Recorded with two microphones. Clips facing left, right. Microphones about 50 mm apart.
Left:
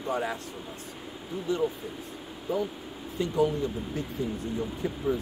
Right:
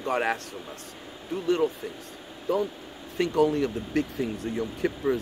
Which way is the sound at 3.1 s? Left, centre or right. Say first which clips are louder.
Right 3 dB; right.